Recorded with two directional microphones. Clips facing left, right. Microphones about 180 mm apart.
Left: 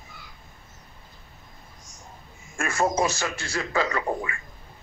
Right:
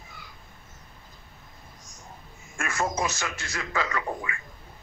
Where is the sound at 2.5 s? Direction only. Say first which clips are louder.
Left 5 dB; 30° left (ahead or behind).